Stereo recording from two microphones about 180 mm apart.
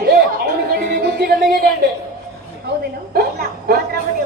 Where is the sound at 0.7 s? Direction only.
60° right (ahead or behind).